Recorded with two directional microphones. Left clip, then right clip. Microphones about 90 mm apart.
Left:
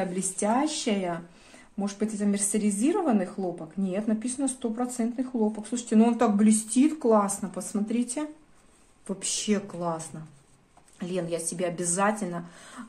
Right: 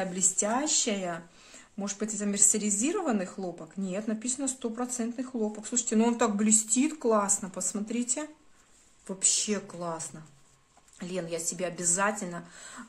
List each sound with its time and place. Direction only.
0.0 s speech: 25° right (ahead or behind)